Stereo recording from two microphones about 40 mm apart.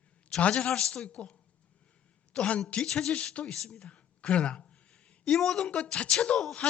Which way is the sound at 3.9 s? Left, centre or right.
Left.